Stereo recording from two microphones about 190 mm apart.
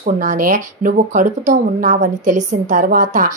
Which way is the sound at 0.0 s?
45° right (ahead or behind).